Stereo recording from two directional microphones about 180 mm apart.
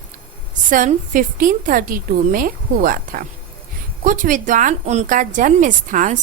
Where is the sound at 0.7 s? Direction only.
45° right (ahead or behind).